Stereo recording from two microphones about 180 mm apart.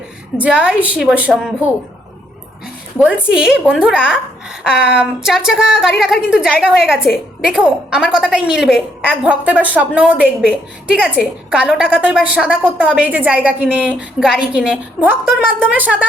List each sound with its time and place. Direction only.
0.3 s a woman's voice: 5° right (ahead or behind)
3.0 s a woman's voice: 5° right (ahead or behind)